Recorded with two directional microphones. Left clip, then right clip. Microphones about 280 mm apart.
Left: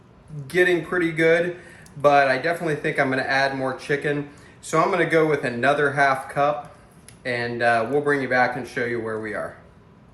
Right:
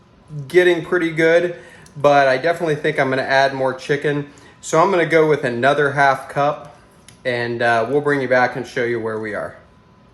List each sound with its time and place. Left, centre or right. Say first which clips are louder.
0.4 s speech: right 5 dB; right